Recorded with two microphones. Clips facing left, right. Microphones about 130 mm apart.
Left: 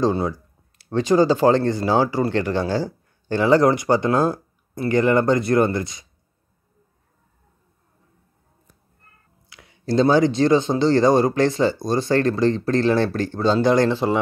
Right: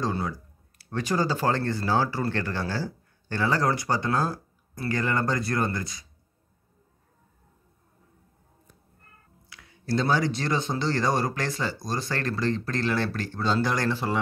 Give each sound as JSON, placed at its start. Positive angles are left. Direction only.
{"t": 0.0, "sound": "speech", "side_deg": 25}
{"t": 9.5, "sound": "speech", "side_deg": 20}